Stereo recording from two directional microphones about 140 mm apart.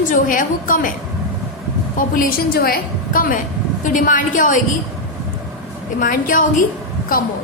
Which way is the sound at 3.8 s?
70° left (ahead or behind).